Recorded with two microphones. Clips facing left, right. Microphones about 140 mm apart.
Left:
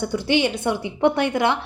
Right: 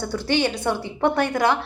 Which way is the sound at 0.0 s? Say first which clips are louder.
Left 2 dB; 15° left (ahead or behind).